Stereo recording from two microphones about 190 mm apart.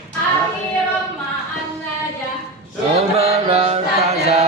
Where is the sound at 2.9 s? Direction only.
35° right (ahead or behind).